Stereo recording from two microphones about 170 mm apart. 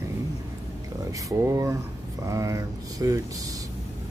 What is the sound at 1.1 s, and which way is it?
Speech, 20° right (ahead or behind).